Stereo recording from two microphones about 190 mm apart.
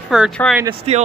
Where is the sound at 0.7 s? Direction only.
35° right (ahead or behind).